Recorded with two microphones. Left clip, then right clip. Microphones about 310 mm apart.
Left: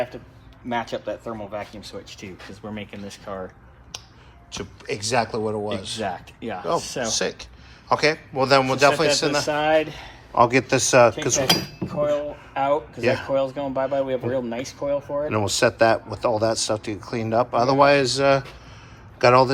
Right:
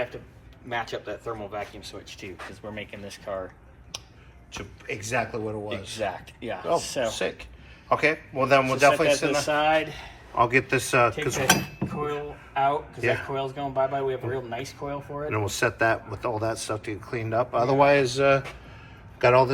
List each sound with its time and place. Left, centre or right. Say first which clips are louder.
0.7 s speech: left 4 dB; left
4.5 s speech: left 4 dB; centre
6.0 s speech: left 2 dB; left
7.9 s speech: left 3 dB; centre
9.4 s speech: left 2 dB; left
10.3 s speech: left 4 dB; centre
11.3 s speech: left 2 dB; centre
13.0 s speech: left 3 dB; centre
13.3 s speech: left 5 dB; left
15.3 s speech: left 4 dB; centre